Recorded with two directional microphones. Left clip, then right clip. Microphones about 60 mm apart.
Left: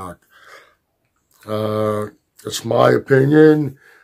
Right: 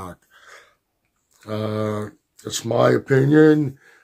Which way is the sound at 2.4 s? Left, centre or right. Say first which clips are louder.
Left 4 dB; left.